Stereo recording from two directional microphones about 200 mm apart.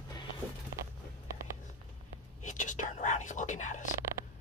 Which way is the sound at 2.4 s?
40° left (ahead or behind).